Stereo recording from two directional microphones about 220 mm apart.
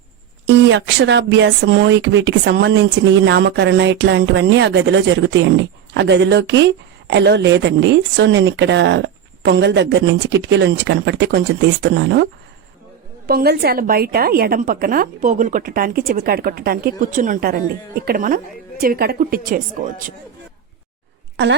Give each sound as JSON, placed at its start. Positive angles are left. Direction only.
{"t": 0.4, "sound": "speech", "side_deg": -55}
{"t": 21.4, "sound": "speech", "side_deg": -50}